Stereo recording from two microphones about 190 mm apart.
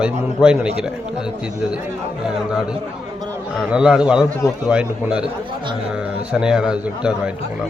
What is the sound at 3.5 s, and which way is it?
Speech, 5° right (ahead or behind).